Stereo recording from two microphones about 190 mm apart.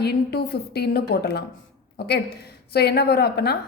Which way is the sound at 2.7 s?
55° left (ahead or behind).